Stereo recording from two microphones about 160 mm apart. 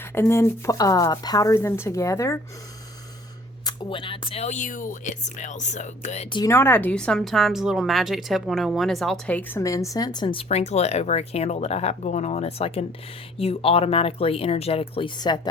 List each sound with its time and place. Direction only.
0.1 s speech: 15° left (ahead or behind)
3.6 s speech: 25° left (ahead or behind); by 6.2 s 45° left (ahead or behind)
6.3 s a woman's voice: 20° left (ahead or behind)
10.5 s speech: 45° left (ahead or behind)